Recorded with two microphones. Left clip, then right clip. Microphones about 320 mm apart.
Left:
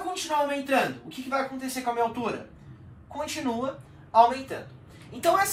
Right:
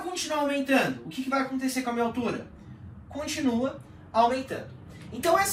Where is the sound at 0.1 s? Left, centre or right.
Centre.